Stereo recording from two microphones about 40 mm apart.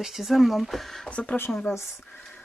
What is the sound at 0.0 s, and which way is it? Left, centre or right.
Speech, centre.